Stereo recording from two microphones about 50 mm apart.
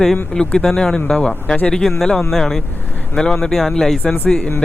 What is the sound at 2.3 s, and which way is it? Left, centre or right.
Speech, centre.